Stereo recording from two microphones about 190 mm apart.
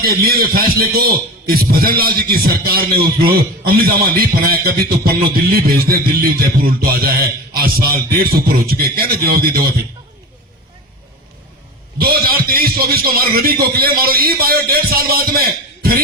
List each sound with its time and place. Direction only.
0.0 s speech: 50° right (ahead or behind)
11.9 s speech: 55° right (ahead or behind)